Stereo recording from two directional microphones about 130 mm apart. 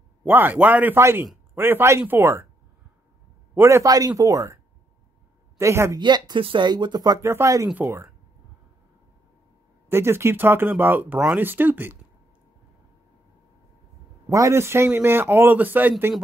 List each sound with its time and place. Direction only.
0.2 s speech: 15° right (ahead or behind)
3.5 s speech: 20° right (ahead or behind)
5.6 s speech: 20° right (ahead or behind)
5.9 s speech: 35° right (ahead or behind); by 8.1 s 20° right (ahead or behind)
9.8 s speech: 20° right (ahead or behind)
14.3 s speech: 25° right (ahead or behind)